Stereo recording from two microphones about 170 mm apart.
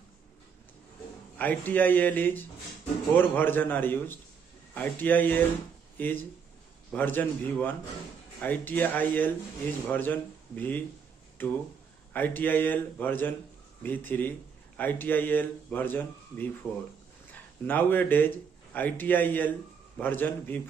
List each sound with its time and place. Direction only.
1.3 s a man's voice: 10° left (ahead or behind)
16.6 s speech: centre (ahead or behind)
17.3 s a man's voice: 10° left (ahead or behind)